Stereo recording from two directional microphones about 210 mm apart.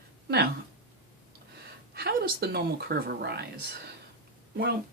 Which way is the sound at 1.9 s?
45° right (ahead or behind).